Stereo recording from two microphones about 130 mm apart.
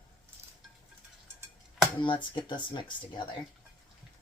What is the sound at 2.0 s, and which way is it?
Speech, 40° left (ahead or behind).